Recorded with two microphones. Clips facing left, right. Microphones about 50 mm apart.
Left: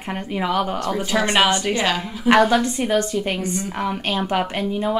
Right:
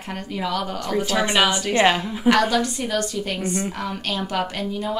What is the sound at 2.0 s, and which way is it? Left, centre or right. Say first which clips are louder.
A woman's voice: left 3 dB; left.